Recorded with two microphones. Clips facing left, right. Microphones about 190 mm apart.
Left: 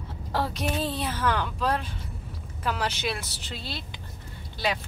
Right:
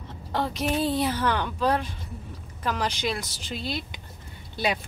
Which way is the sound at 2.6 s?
5° left (ahead or behind).